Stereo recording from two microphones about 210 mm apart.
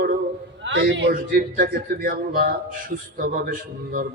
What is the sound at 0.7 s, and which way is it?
Speech, 60° right (ahead or behind).